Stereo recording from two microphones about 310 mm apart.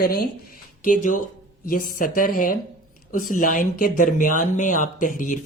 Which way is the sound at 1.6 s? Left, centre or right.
Left.